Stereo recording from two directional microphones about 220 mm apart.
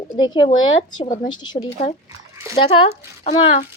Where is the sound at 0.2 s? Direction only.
20° left (ahead or behind).